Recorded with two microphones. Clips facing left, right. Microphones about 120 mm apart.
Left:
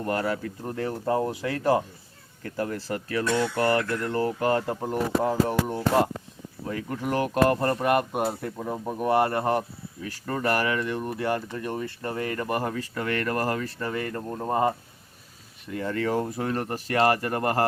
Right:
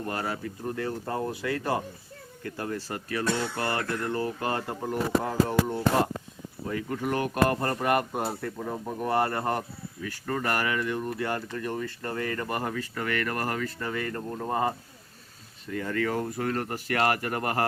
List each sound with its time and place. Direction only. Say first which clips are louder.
0.0 s speech: left 5 dB; 45° left (ahead or behind)
0.9 s speech: left 9 dB; 25° left (ahead or behind)
4.2 s speech: left 5 dB; 25° left (ahead or behind)
6.7 s speech: even; 35° left (ahead or behind)
7.0 s speech: left 3 dB; 25° left (ahead or behind)
15.7 s speech: left 2 dB; 25° left (ahead or behind)